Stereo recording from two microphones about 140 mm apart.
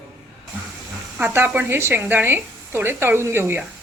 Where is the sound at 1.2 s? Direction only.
15° right (ahead or behind).